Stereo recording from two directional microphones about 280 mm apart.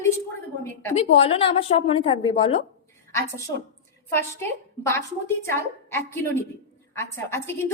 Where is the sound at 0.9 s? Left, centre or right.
Left.